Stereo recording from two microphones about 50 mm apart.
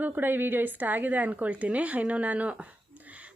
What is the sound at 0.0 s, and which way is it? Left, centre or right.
A woman's voice, right.